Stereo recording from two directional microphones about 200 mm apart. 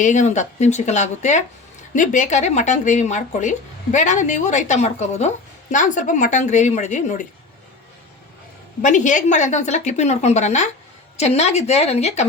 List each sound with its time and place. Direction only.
0.0 s speech: 35° left (ahead or behind)
8.8 s speech: 40° left (ahead or behind)